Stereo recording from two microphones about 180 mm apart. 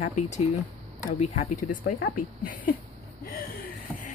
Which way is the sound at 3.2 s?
50° left (ahead or behind).